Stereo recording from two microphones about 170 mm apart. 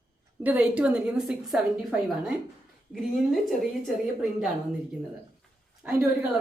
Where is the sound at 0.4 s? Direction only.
10° right (ahead or behind).